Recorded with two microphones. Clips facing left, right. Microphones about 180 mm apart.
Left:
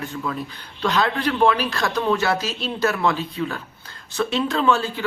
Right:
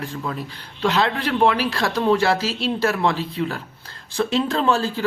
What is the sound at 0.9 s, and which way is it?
Speech, 25° right (ahead or behind).